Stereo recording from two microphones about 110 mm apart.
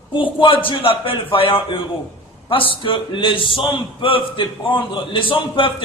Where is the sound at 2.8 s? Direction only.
50° left (ahead or behind).